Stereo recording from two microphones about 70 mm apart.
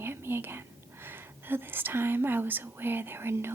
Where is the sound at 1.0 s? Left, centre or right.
Right.